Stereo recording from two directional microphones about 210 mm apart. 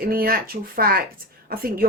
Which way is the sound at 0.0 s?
45° right (ahead or behind).